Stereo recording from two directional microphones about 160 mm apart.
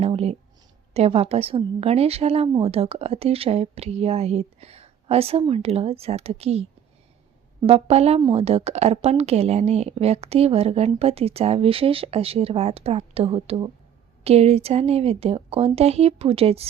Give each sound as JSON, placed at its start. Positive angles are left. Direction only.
{"t": 0.0, "sound": "a woman's voice", "side_deg": -40}